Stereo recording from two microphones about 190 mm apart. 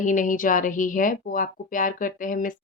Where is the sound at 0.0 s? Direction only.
45° left (ahead or behind).